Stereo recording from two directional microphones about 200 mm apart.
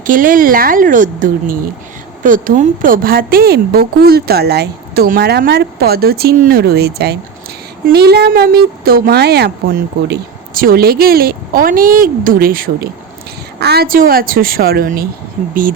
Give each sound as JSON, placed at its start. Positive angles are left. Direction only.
{"t": 0.0, "sound": "speech", "side_deg": -40}